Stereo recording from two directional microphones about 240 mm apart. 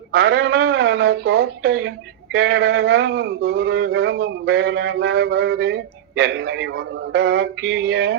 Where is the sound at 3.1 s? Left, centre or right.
Right.